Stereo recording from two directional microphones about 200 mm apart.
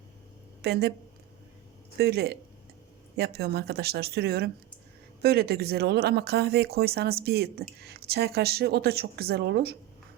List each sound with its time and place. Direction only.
0.6 s speech: 50° right (ahead or behind)
2.0 s speech: 55° right (ahead or behind)